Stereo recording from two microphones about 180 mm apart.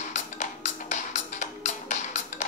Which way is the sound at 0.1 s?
40° left (ahead or behind).